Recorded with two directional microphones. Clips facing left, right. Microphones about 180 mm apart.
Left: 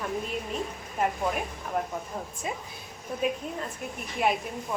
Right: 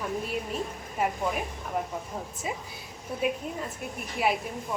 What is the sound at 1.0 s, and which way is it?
Speech, centre (ahead or behind).